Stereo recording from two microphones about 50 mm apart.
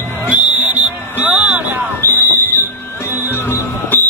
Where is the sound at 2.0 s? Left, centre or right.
Left.